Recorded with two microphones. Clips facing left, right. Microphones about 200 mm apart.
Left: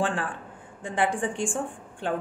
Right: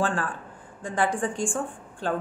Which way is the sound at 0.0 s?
25° left (ahead or behind).